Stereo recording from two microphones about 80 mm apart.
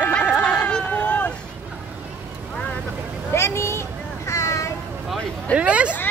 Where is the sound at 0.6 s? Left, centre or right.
Centre.